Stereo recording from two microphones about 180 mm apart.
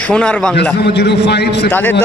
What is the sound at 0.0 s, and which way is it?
Speech, 5° left (ahead or behind).